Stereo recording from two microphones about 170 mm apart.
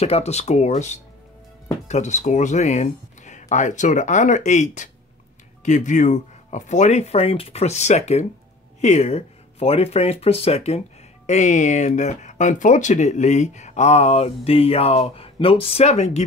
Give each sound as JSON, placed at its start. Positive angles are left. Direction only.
{"t": 0.0, "sound": "speech", "side_deg": 40}